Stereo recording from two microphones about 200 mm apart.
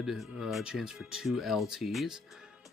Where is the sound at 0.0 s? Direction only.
Centre (ahead or behind).